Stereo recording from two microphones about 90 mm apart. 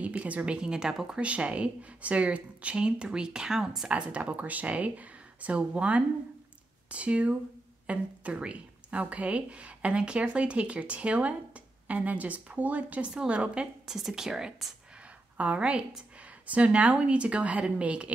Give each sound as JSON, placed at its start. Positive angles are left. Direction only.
{"t": 0.0, "sound": "a woman's voice", "side_deg": -15}